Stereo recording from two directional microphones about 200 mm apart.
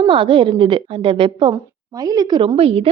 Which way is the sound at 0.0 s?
25° right (ahead or behind).